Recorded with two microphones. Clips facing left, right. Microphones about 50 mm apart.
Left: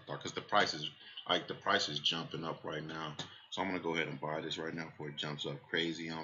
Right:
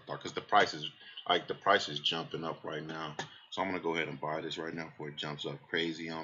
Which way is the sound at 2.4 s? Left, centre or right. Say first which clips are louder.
Right 2 dB; centre.